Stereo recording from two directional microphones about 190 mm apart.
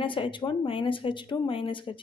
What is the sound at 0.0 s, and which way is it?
A woman's voice, 25° left (ahead or behind).